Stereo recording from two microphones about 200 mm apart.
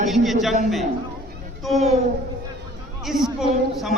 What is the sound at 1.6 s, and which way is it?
Speech, centre (ahead or behind).